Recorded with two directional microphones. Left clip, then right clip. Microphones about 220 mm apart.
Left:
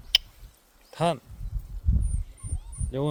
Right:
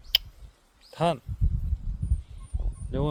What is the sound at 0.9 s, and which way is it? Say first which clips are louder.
Speech: even; centre (ahead or behind).